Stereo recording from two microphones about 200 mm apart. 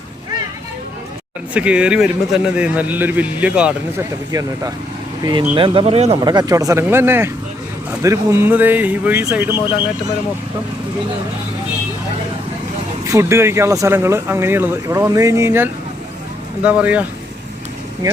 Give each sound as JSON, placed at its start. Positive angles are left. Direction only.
{"t": 1.5, "sound": "a man's voice", "side_deg": -5}
{"t": 4.3, "sound": "speech", "side_deg": -20}
{"t": 9.6, "sound": "speech", "side_deg": 20}
{"t": 13.1, "sound": "speech", "side_deg": -15}